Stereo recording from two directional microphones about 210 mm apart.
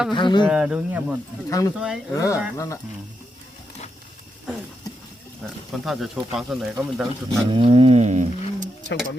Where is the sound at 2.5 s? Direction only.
15° left (ahead or behind).